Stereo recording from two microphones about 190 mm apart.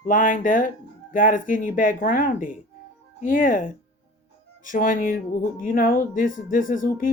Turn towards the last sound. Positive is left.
turn(degrees=45)  # may be behind; listen again after turning